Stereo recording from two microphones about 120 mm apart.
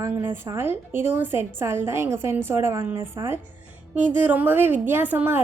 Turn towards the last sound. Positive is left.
turn(degrees=-15)  # may be behind; listen again after turning